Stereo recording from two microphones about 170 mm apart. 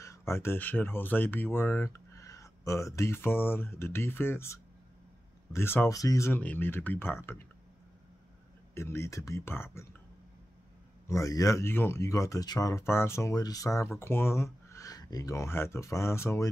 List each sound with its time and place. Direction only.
0.0 s speech: 15° left (ahead or behind)
8.7 s speech: 15° left (ahead or behind)
11.1 s speech: 20° left (ahead or behind)